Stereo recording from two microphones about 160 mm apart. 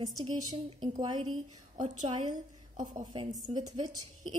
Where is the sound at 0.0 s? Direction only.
25° right (ahead or behind).